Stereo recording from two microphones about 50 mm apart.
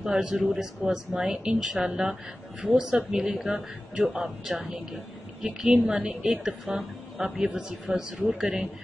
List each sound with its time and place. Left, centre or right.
0.0 s a woman's voice: centre
0.4 s a woman's voice: centre